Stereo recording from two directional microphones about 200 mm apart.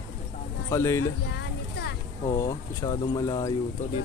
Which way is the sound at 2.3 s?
20° left (ahead or behind).